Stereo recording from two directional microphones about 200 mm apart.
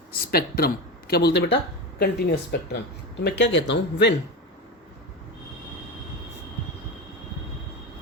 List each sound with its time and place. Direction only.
0.1 s speech: 50° left (ahead or behind)